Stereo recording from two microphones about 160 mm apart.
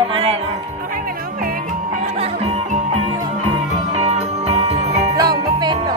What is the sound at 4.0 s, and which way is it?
Jingle bell, 40° right (ahead or behind).